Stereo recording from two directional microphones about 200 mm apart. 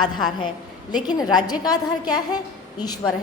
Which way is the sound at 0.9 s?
20° left (ahead or behind).